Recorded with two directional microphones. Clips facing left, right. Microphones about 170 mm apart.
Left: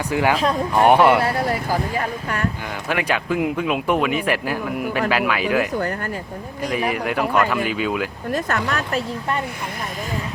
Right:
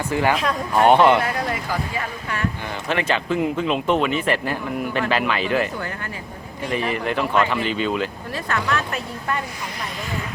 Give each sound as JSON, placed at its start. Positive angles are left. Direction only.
{"t": 0.1, "sound": "speech", "side_deg": 10}
{"t": 1.2, "sound": "speech", "side_deg": 35}
{"t": 2.9, "sound": "speech", "side_deg": 10}
{"t": 6.7, "sound": "speech", "side_deg": 10}
{"t": 8.3, "sound": "speech", "side_deg": 45}